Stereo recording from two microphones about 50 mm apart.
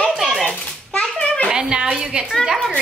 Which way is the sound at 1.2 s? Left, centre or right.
Centre.